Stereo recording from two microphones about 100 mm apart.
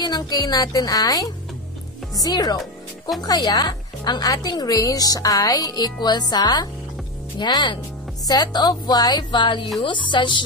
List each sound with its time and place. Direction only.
0.0 s a woman's voice: 40° left (ahead or behind)